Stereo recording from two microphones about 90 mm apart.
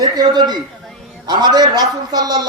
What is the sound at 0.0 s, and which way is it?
A man's voice, 50° right (ahead or behind).